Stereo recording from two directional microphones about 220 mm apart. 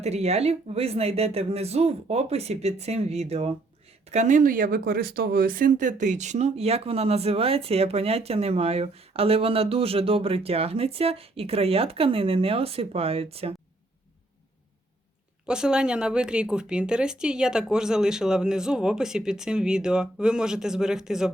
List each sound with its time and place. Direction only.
0.0 s speech: 30° right (ahead or behind)
15.4 s speech: 5° right (ahead or behind)